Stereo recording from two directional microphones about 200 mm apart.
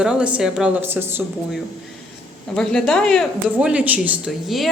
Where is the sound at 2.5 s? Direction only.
5° left (ahead or behind).